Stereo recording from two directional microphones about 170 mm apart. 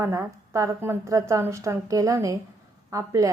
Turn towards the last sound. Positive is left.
turn(degrees=-20)  # may be behind; listen again after turning